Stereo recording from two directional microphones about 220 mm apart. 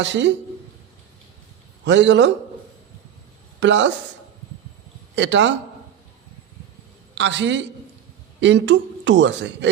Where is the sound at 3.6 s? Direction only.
55° right (ahead or behind).